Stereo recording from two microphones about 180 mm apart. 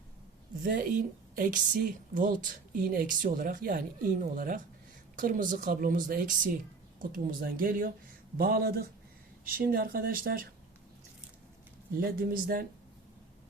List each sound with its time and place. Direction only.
0.6 s a woman's voice: 50° right (ahead or behind)
11.9 s speech: 55° right (ahead or behind)